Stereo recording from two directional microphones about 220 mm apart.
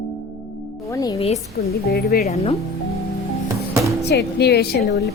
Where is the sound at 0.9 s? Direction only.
15° left (ahead or behind).